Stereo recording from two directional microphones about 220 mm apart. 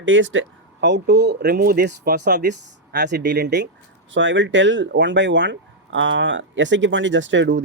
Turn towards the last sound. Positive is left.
turn(degrees=-55)  # may be behind; listen again after turning